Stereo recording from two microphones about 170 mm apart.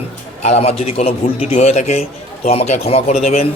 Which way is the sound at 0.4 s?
40° left (ahead or behind).